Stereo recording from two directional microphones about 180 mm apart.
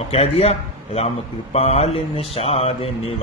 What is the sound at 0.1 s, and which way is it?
Speech, 35° left (ahead or behind).